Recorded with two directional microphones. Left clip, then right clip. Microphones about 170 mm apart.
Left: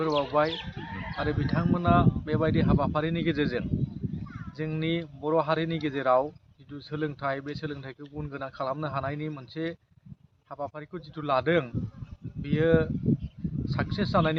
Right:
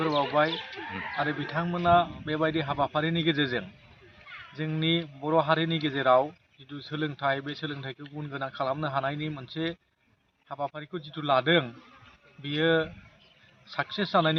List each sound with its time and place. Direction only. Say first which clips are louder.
0.0 s a man's voice: even; 10° left (ahead or behind)